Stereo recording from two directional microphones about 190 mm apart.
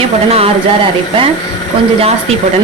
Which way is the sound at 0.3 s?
30° right (ahead or behind).